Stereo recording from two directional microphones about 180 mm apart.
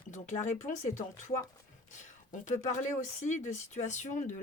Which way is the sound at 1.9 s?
40° left (ahead or behind).